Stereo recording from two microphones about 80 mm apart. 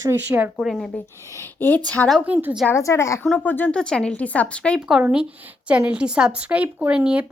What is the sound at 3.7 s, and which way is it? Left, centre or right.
A woman's voice, centre.